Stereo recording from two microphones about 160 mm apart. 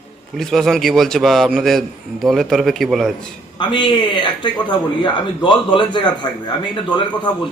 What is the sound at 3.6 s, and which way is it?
A man's voice, 30° left (ahead or behind).